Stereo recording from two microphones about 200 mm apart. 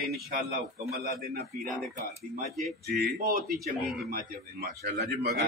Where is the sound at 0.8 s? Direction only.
45° right (ahead or behind).